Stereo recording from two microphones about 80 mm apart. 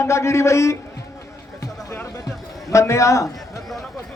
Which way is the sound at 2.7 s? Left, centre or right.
Left.